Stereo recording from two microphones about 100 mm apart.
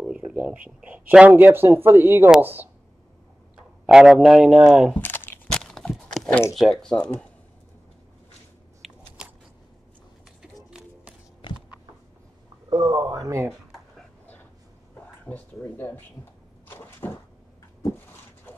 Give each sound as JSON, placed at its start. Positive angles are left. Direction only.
{"t": 0.0, "sound": "speech", "side_deg": -10}
{"t": 3.5, "sound": "speech", "side_deg": -5}
{"t": 4.9, "sound": "crumpling", "side_deg": 20}
{"t": 5.5, "sound": "a sound", "side_deg": 5}
{"t": 6.5, "sound": "speech", "side_deg": 0}
{"t": 8.8, "sound": "biting", "side_deg": -5}
{"t": 10.4, "sound": "run", "side_deg": -5}
{"t": 11.4, "sound": "a sound", "side_deg": 50}
{"t": 12.6, "sound": "speech", "side_deg": -40}
{"t": 15.2, "sound": "speech", "side_deg": 20}
{"t": 16.6, "sound": "a sound", "side_deg": 20}